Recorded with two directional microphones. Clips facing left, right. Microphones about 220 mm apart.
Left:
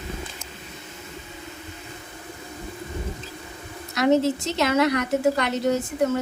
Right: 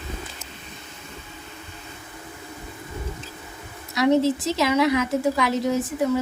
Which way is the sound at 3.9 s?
Centre (ahead or behind).